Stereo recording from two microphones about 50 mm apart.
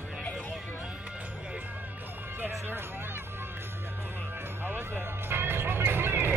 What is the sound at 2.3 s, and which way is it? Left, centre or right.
Music, right.